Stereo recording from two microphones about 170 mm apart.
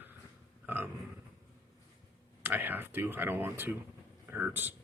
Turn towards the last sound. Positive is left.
turn(degrees=-10)  # may be behind; listen again after turning